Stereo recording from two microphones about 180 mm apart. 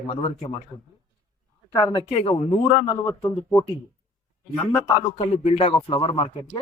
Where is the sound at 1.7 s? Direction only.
20° left (ahead or behind).